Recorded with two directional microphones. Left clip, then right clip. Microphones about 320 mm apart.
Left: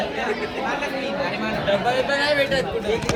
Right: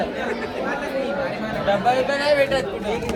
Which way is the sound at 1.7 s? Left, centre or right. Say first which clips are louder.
Right 2 dB; centre.